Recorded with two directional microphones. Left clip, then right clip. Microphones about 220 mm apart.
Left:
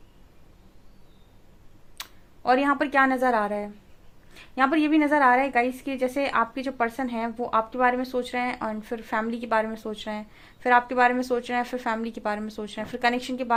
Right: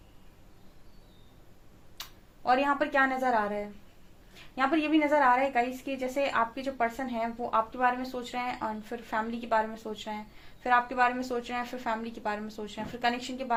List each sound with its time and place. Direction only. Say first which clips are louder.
2.0 s a woman's voice: left 4 dB; 45° left (ahead or behind)